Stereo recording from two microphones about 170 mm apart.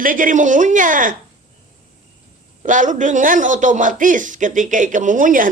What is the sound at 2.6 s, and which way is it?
A man's voice, 50° right (ahead or behind).